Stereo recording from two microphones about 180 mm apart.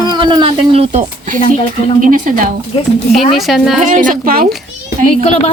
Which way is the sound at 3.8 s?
45° right (ahead or behind).